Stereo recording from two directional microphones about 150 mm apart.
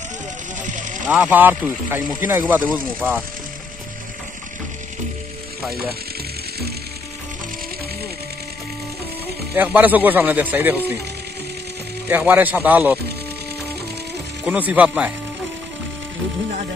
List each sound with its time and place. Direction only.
0.6 s vehicle: 60° right (ahead or behind)
1.0 s a man's voice: 10° right (ahead or behind)
9.6 s a man's voice: 10° right (ahead or behind)
12.1 s a man's voice: 15° right (ahead or behind)
14.4 s a man's voice: 10° right (ahead or behind)